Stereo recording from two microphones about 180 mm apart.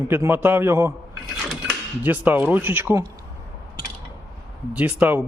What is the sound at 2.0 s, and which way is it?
A man's voice, 10° right (ahead or behind).